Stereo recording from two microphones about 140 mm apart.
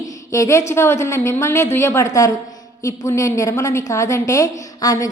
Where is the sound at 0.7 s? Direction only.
20° left (ahead or behind).